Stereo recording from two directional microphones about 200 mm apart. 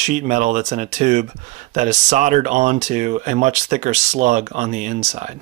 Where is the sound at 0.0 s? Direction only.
35° right (ahead or behind).